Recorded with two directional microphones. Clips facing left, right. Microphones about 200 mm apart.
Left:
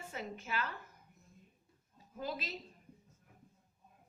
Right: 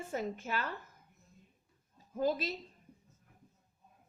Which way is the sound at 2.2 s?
45° right (ahead or behind).